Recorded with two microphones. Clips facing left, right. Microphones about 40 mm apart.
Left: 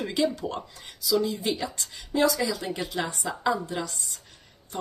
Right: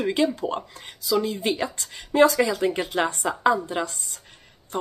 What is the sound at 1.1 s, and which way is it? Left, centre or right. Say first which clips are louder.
Speech: right 2 dB; right.